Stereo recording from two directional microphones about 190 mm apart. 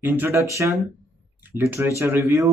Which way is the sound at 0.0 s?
10° right (ahead or behind).